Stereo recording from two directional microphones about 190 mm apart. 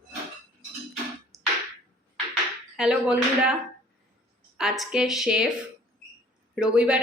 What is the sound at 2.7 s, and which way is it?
Speech, 5° right (ahead or behind).